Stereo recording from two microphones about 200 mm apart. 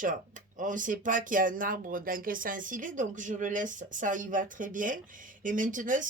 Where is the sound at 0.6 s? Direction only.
40° right (ahead or behind).